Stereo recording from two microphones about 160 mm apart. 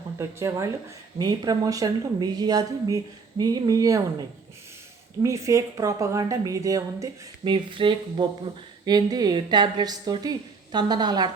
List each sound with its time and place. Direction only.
0.2 s a woman's voice: 15° right (ahead or behind)
5.2 s a woman's voice: 20° right (ahead or behind)